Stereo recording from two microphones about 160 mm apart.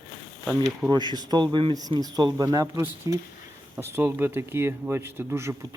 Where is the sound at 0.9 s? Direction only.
25° right (ahead or behind).